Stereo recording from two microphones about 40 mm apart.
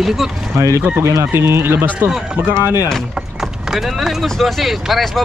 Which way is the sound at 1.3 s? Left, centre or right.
Right.